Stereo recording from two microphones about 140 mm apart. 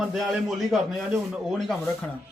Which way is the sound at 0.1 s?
Centre (ahead or behind).